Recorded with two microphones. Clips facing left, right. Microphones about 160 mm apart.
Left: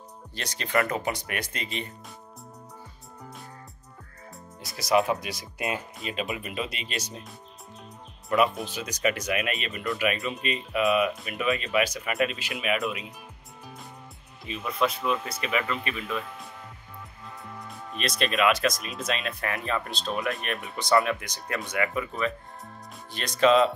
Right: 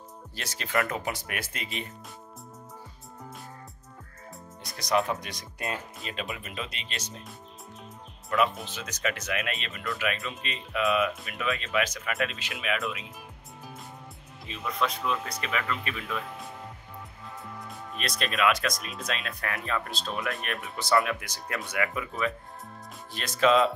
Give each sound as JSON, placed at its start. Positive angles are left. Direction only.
{"t": 0.4, "sound": "speech", "side_deg": -5}
{"t": 4.6, "sound": "speech", "side_deg": 5}
{"t": 8.3, "sound": "speech", "side_deg": 15}
{"t": 14.6, "sound": "speech", "side_deg": 10}